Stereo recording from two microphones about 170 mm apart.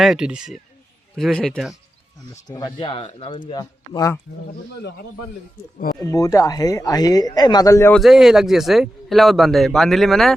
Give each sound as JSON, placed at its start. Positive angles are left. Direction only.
{"t": 0.0, "sound": "a man's voice", "side_deg": -5}
{"t": 2.5, "sound": "speech", "side_deg": 25}
{"t": 6.0, "sound": "speech", "side_deg": 20}
{"t": 7.9, "sound": "a man's voice", "side_deg": 0}